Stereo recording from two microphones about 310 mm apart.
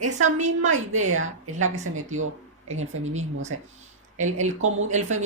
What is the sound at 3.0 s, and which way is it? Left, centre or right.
A woman's voice, right.